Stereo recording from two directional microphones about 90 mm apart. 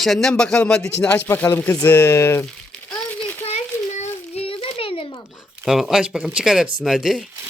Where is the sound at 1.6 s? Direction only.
40° left (ahead or behind).